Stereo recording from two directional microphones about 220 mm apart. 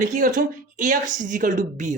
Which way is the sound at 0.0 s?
35° right (ahead or behind).